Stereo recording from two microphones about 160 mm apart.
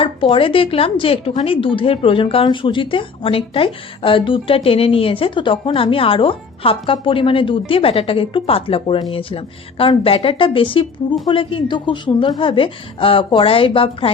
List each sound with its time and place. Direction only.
0.0 s speech: 35° left (ahead or behind)